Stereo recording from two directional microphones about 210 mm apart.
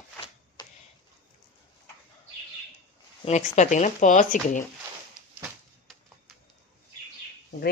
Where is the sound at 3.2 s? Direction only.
35° left (ahead or behind).